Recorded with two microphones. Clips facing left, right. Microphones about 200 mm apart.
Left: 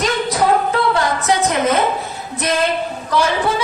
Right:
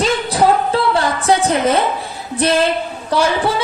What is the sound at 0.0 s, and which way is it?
Music, 30° right (ahead or behind).